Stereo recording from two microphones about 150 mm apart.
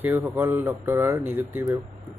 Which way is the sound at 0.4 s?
15° right (ahead or behind).